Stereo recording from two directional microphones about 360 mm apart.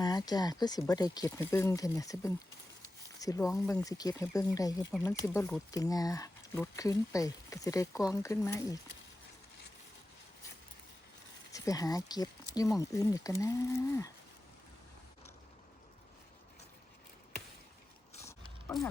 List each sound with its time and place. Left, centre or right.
0.0 s speech: centre
11.5 s speech: centre
18.1 s a sound: centre